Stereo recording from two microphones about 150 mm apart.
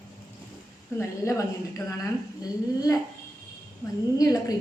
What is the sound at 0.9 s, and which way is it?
Speech, 20° left (ahead or behind).